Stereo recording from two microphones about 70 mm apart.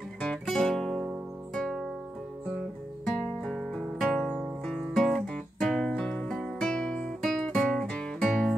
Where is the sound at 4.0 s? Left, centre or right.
Centre.